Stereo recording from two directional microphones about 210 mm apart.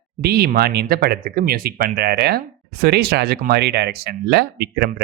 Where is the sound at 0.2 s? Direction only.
50° right (ahead or behind).